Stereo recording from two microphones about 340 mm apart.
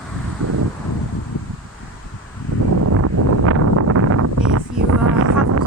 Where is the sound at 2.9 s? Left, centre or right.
Right.